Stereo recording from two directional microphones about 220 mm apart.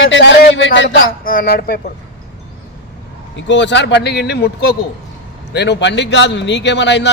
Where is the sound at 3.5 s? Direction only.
55° left (ahead or behind).